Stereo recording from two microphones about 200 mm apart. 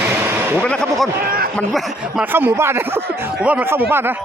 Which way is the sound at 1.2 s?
50° right (ahead or behind).